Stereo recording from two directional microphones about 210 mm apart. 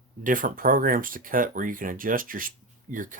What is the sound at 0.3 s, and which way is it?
Speech, 40° right (ahead or behind).